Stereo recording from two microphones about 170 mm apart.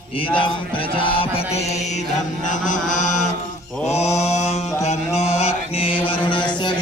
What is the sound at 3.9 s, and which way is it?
Mantra, 40° left (ahead or behind).